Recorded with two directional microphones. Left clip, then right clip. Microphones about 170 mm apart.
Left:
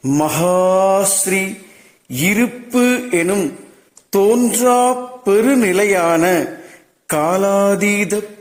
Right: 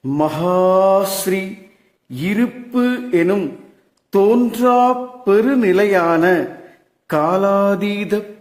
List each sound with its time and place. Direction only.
0.1 s mantra: 20° left (ahead or behind)
2.1 s speech: 20° left (ahead or behind)